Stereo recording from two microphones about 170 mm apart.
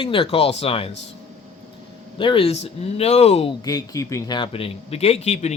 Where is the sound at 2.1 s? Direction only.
30° left (ahead or behind).